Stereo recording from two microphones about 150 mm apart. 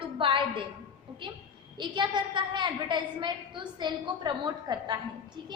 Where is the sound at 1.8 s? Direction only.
30° right (ahead or behind).